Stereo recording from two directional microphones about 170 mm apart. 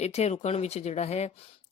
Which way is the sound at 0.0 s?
40° left (ahead or behind).